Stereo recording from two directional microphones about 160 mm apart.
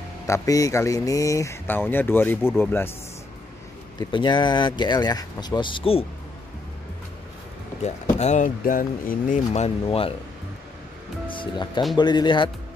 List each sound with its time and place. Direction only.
0.3 s speech: 20° left (ahead or behind)
4.1 s speech: 30° left (ahead or behind)
7.8 s speech: 45° left (ahead or behind); by 9.4 s 60° left (ahead or behind)
9.5 s speech: 40° left (ahead or behind)
11.2 s speech: 30° left (ahead or behind)